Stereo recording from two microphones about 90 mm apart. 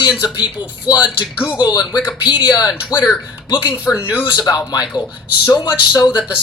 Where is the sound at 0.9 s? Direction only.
50° left (ahead or behind).